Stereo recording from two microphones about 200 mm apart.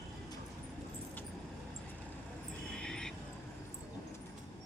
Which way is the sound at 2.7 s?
5° left (ahead or behind).